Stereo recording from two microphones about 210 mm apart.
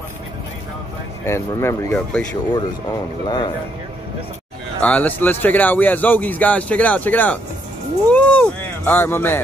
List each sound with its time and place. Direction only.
1.2 s speech: 15° left (ahead or behind)
4.8 s speech: 5° left (ahead or behind)
8.1 s a sound: 5° left (ahead or behind)